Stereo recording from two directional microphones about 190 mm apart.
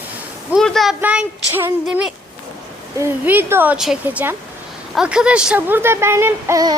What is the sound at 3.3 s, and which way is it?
Speech, 10° right (ahead or behind).